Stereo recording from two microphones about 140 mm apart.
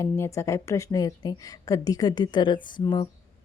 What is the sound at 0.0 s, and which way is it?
A woman's voice, 20° left (ahead or behind).